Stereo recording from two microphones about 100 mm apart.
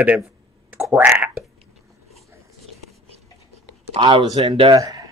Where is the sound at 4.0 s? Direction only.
50° right (ahead or behind).